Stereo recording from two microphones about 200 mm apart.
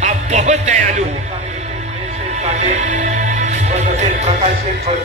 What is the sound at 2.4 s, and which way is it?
Speech, 35° right (ahead or behind).